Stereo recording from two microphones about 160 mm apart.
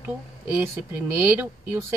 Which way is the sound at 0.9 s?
15° right (ahead or behind).